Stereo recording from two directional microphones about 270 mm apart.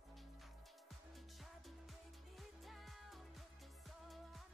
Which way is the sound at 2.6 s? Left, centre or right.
Centre.